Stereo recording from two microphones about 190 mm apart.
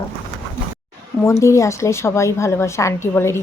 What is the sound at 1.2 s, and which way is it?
A woman's voice, 15° left (ahead or behind).